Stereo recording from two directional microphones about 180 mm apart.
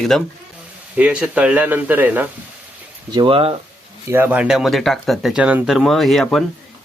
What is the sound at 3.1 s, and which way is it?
Speech, 30° right (ahead or behind).